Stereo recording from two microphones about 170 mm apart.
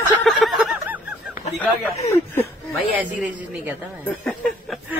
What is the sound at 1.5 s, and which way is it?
Speech, 40° left (ahead or behind).